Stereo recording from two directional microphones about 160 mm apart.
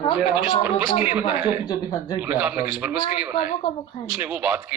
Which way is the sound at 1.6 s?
25° left (ahead or behind).